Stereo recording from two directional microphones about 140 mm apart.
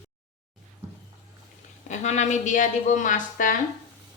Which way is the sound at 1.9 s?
55° left (ahead or behind).